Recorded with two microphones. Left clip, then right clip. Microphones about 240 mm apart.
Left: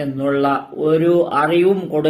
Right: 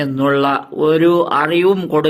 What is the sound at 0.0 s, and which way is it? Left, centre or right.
Speech, right.